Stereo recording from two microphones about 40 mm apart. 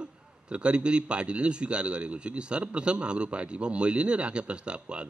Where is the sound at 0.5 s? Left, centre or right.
Right.